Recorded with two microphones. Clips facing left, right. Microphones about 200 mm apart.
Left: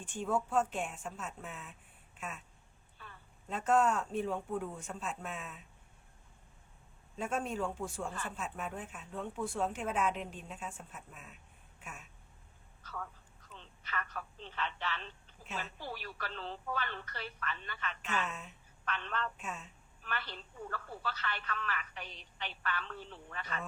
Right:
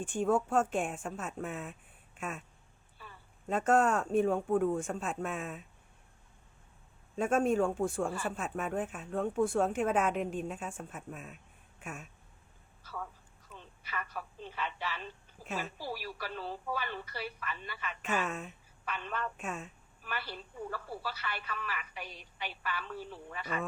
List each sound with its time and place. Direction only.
0.0 s speech: 50° right (ahead or behind)
3.5 s speech: 50° right (ahead or behind)
7.2 s speech: 50° right (ahead or behind)
11.8 s a sound: 50° right (ahead or behind)
12.8 s telephone: 10° right (ahead or behind)
15.8 s a woman's voice: 10° right (ahead or behind)
18.0 s speech: 50° right (ahead or behind)
18.9 s a woman's voice: 10° right (ahead or behind)
19.4 s speech: 50° right (ahead or behind)
20.0 s a woman's voice: 10° right (ahead or behind)